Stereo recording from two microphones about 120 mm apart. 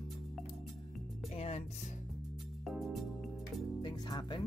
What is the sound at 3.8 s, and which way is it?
Speech, 40° left (ahead or behind).